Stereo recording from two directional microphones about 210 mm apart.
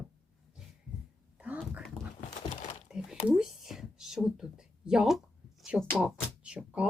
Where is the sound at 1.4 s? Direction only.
5° right (ahead or behind).